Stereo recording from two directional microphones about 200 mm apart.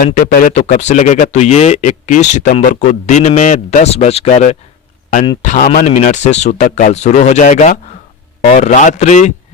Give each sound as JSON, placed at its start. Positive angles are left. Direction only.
{"t": 0.0, "sound": "speech", "side_deg": 45}